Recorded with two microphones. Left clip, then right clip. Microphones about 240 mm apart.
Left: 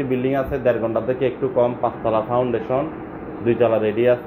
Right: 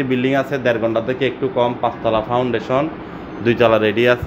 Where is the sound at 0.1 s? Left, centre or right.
Right.